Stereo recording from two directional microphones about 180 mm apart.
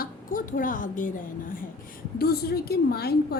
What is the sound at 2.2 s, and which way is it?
Speech, 60° left (ahead or behind).